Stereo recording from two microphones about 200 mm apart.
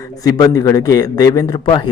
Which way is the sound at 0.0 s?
15° left (ahead or behind).